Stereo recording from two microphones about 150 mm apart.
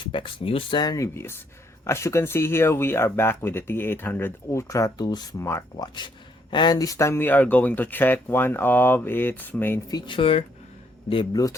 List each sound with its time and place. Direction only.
0.0 s speech: 35° left (ahead or behind); by 5.6 s 15° left (ahead or behind)
5.8 s speech: 30° left (ahead or behind); by 9.8 s 15° left (ahead or behind)
9.9 s speech: 35° left (ahead or behind)